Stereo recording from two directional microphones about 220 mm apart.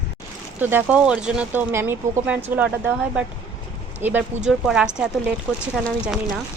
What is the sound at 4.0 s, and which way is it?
A woman's voice, 10° right (ahead or behind).